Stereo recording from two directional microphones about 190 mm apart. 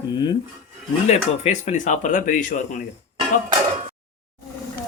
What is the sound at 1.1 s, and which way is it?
Speech, 35° left (ahead or behind).